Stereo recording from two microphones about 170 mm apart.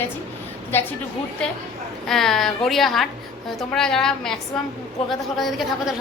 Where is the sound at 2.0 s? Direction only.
Centre (ahead or behind).